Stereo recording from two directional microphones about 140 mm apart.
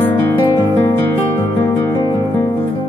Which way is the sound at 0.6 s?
20° left (ahead or behind).